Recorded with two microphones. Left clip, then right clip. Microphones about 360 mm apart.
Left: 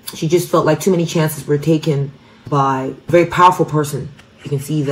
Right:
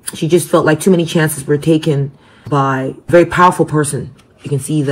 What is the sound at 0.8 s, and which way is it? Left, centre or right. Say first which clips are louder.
Speech: right 3 dB; right.